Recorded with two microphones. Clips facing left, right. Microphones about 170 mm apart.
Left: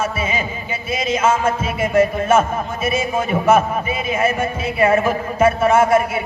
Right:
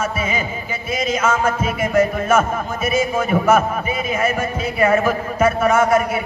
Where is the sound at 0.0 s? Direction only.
30° left (ahead or behind).